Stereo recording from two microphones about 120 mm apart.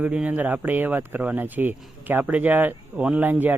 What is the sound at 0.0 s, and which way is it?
Speech, 10° right (ahead or behind).